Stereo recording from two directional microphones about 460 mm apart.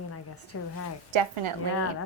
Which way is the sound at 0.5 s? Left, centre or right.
Left.